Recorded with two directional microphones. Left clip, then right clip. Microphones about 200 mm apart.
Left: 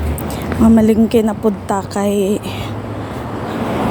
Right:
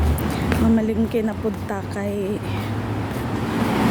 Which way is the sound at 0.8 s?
40° left (ahead or behind).